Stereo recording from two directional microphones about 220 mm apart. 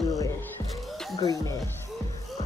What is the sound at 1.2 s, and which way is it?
Speech, 15° left (ahead or behind).